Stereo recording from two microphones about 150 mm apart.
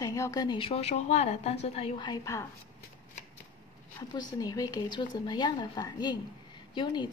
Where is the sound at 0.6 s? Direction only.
40° left (ahead or behind).